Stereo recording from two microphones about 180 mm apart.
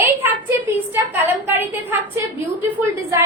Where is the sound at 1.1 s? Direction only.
10° right (ahead or behind).